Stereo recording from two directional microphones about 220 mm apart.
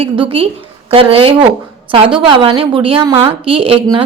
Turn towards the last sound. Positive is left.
turn(degrees=-25)  # may be behind; listen again after turning